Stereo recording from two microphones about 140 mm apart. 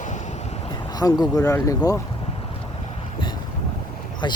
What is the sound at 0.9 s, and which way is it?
Speech, 25° left (ahead or behind).